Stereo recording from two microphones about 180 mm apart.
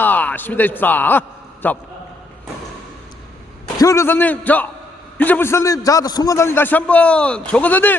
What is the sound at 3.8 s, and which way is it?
A man's voice, 15° left (ahead or behind).